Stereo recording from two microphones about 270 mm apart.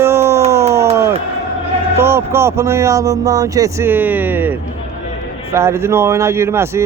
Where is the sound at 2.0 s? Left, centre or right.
Centre.